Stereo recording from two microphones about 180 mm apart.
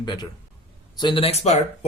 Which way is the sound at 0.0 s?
25° left (ahead or behind).